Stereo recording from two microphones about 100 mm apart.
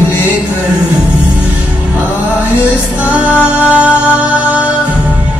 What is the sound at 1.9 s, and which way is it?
Music, 15° right (ahead or behind).